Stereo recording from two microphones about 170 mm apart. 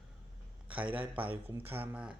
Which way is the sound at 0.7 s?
10° right (ahead or behind).